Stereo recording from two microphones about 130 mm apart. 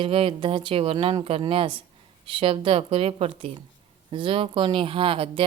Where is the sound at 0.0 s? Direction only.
45° right (ahead or behind).